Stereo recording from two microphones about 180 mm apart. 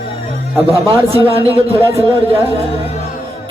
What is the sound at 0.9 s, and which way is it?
Speech, 30° right (ahead or behind).